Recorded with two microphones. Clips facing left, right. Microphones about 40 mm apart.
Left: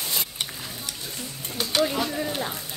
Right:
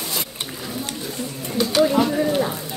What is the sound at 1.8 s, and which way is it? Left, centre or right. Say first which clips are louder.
Run: right 8 dB; centre.